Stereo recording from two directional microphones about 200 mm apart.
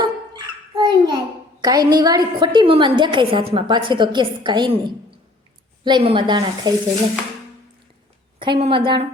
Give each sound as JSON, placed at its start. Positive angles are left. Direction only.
{"t": 0.0, "sound": "dog", "side_deg": -20}
{"t": 1.6, "sound": "a woman's voice", "side_deg": -20}
{"t": 8.4, "sound": "a woman's voice", "side_deg": -25}